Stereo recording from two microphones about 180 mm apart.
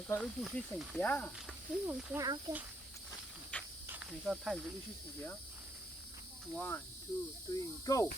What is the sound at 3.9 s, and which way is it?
Speech, 5° right (ahead or behind).